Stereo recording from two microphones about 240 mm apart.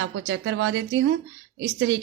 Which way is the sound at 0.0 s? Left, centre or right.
Right.